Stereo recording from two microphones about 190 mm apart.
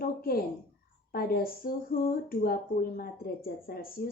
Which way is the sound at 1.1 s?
55° left (ahead or behind).